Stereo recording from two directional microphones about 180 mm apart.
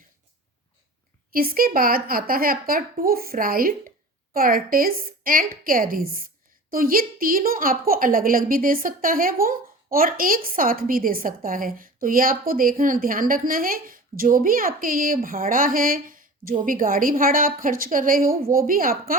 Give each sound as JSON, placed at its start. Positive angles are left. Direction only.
{"t": 1.3, "sound": "a woman's voice", "side_deg": -55}